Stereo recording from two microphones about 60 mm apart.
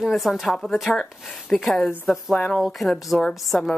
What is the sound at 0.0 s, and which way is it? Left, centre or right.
A woman's voice, centre.